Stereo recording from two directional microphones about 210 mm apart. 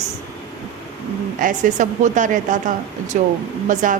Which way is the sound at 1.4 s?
40° right (ahead or behind).